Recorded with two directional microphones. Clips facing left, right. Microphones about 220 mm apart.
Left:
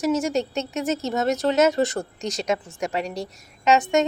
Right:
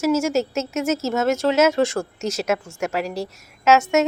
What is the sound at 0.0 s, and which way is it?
Speech, centre (ahead or behind).